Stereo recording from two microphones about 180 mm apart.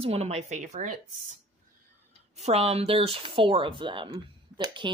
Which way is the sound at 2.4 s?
35° right (ahead or behind).